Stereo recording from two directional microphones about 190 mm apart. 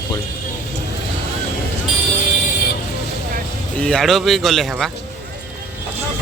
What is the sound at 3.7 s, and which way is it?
Speech, 5° left (ahead or behind).